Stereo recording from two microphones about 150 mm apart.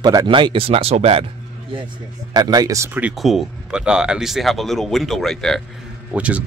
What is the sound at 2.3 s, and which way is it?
Speech, 25° right (ahead or behind).